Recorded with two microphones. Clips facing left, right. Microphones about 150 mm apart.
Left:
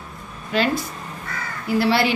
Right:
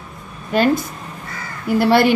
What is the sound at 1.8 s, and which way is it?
Speech, 50° right (ahead or behind).